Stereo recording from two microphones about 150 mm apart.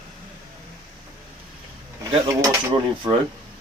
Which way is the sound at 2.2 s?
20° right (ahead or behind).